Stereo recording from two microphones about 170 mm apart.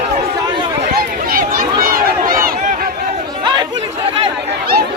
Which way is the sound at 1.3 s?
60° right (ahead or behind).